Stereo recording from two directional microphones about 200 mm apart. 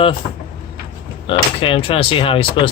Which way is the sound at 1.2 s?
25° left (ahead or behind).